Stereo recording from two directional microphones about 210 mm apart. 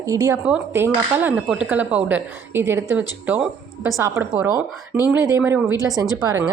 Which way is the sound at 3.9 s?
15° right (ahead or behind).